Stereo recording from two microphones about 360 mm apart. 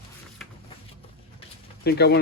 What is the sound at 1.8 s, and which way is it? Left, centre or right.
Speech, left.